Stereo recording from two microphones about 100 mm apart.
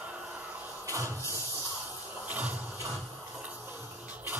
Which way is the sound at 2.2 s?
15° right (ahead or behind).